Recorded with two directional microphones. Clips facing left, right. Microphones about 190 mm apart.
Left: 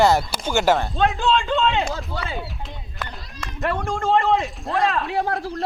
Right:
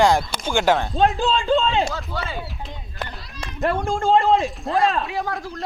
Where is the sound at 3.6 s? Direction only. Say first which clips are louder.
Right 2 dB; 30° right (ahead or behind).